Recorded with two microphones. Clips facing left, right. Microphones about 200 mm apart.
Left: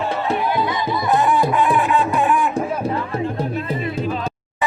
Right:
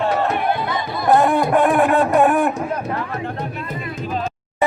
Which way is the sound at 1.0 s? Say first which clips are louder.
Right 3 dB; 55° right (ahead or behind).